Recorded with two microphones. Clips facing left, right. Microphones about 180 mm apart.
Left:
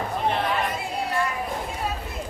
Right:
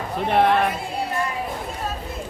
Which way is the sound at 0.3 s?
60° right (ahead or behind).